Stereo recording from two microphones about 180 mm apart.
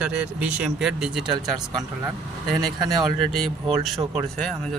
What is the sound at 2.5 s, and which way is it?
Speech, centre (ahead or behind).